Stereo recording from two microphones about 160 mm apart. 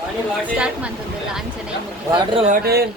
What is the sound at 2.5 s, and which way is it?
Speech, 70° right (ahead or behind).